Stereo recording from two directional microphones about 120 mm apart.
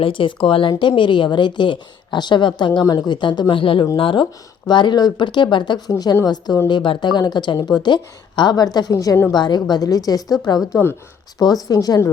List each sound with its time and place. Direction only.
0.0 s a woman's voice: 45° left (ahead or behind); by 12.0 s 30° left (ahead or behind)